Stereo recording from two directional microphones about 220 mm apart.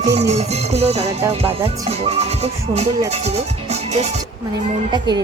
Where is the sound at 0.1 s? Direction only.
30° right (ahead or behind).